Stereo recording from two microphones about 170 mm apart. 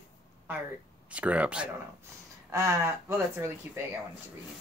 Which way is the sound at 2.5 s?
15° right (ahead or behind).